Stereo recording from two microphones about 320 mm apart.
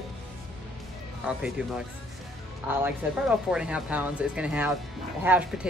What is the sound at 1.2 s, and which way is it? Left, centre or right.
Speech, centre.